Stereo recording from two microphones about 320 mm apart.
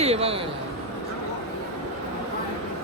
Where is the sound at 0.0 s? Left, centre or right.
Centre.